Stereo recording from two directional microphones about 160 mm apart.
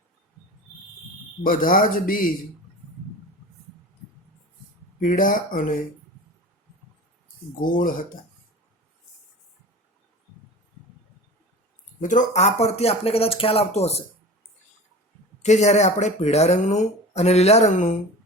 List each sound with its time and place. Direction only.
1.5 s speech: 60° left (ahead or behind)
4.9 s speech: 60° left (ahead or behind)
7.6 s speech: 60° left (ahead or behind)
11.9 s speech: 50° left (ahead or behind)
15.4 s speech: 45° left (ahead or behind)